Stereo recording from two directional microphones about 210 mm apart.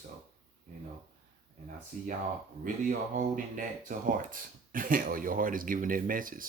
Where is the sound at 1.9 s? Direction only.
40° right (ahead or behind).